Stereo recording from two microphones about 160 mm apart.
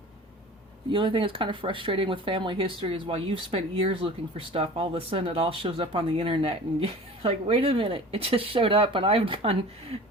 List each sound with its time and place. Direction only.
0.9 s speech: 30° right (ahead or behind)